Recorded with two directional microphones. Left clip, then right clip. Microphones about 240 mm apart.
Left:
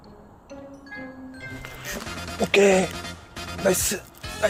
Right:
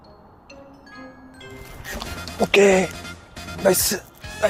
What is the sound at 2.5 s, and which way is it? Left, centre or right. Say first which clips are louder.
Speech: right 2 dB; centre.